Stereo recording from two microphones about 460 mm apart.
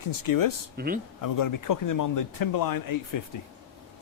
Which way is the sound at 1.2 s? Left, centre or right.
Left.